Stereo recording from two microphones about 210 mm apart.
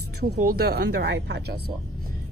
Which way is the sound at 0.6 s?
50° right (ahead or behind).